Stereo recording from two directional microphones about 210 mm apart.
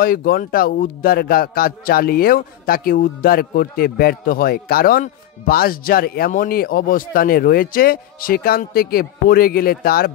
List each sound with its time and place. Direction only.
0.0 s a man's voice: 45° left (ahead or behind)